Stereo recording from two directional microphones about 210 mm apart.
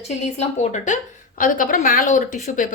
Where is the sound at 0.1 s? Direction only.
30° left (ahead or behind).